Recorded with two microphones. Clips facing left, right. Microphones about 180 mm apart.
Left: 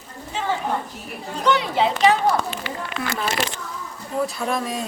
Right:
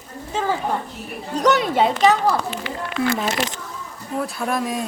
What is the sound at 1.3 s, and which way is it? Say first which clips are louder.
Speech: right 3 dB; 45° right (ahead or behind).